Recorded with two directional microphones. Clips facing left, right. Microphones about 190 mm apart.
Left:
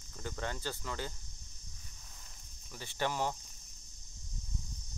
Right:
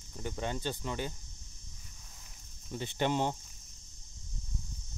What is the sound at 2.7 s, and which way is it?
Speech, 20° right (ahead or behind).